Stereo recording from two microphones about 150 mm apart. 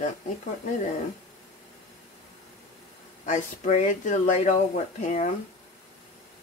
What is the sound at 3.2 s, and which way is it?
Speech, 55° left (ahead or behind).